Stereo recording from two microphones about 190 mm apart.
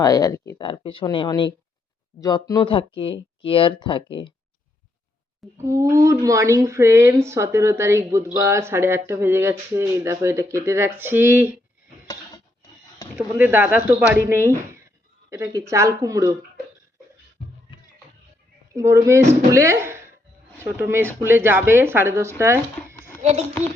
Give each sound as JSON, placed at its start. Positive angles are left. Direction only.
{"t": 0.0, "sound": "speech", "side_deg": 20}
{"t": 5.6, "sound": "speech", "side_deg": -15}
{"t": 13.1, "sound": "speech", "side_deg": -10}
{"t": 18.7, "sound": "speech", "side_deg": -15}